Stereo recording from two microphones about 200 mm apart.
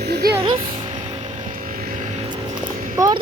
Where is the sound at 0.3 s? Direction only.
20° right (ahead or behind).